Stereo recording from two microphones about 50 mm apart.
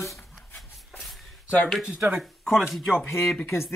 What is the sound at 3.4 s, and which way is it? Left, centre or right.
Speech, left.